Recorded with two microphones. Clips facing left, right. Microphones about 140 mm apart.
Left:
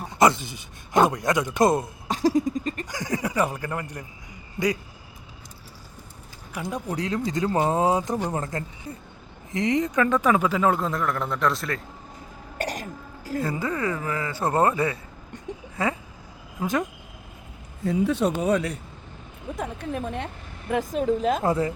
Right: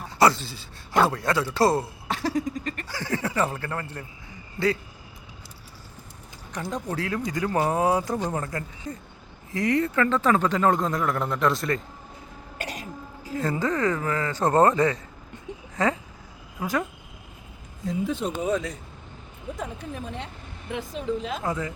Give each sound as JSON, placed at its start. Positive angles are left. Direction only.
{"t": 0.0, "sound": "a man's voice", "side_deg": 20}
{"t": 6.5, "sound": "speech", "side_deg": 10}
{"t": 8.9, "sound": "speech", "side_deg": 30}
{"t": 9.5, "sound": "a man's voice", "side_deg": 20}
{"t": 12.8, "sound": "throat clearing", "side_deg": 45}
{"t": 13.4, "sound": "speech", "side_deg": 10}
{"t": 17.8, "sound": "speech", "side_deg": 70}
{"t": 19.9, "sound": "a woman's voice", "side_deg": 55}
{"t": 21.4, "sound": "speech", "side_deg": 35}